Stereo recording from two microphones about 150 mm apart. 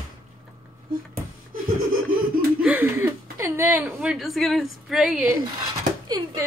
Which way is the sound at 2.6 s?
10° right (ahead or behind).